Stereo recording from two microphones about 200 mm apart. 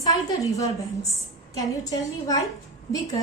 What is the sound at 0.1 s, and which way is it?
A woman's voice, 15° left (ahead or behind).